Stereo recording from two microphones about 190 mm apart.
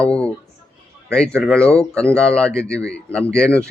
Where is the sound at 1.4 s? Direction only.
5° left (ahead or behind).